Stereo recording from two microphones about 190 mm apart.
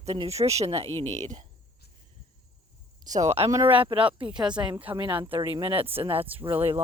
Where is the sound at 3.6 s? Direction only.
25° right (ahead or behind).